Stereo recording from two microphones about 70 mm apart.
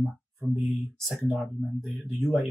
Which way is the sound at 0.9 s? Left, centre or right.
Centre.